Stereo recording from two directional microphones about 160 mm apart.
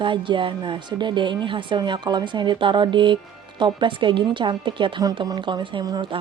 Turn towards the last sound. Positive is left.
turn(degrees=-30)  # may be behind; listen again after turning